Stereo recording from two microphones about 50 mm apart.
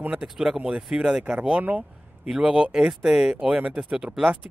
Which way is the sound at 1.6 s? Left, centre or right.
Right.